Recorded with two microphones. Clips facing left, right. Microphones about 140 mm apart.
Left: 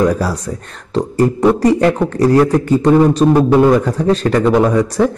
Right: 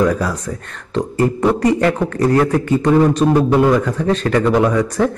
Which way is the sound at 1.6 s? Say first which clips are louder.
Left 3 dB; 40° left (ahead or behind).